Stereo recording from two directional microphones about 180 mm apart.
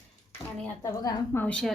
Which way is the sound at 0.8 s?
15° left (ahead or behind).